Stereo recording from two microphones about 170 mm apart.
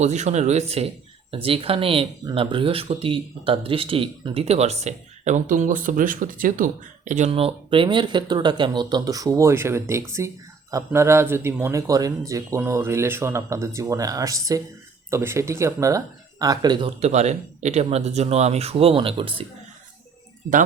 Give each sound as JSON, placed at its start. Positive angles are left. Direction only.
{"t": 0.0, "sound": "speech", "side_deg": -45}
{"t": 7.3, "sound": "speech", "side_deg": -35}
{"t": 17.0, "sound": "speech", "side_deg": -40}